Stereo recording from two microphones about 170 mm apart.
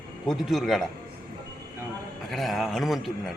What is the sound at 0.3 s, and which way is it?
Speech, centre (ahead or behind).